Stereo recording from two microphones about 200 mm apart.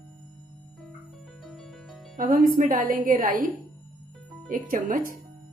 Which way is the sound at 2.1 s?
45° right (ahead or behind).